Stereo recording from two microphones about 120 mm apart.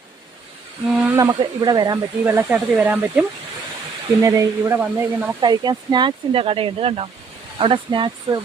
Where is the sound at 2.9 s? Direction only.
15° right (ahead or behind).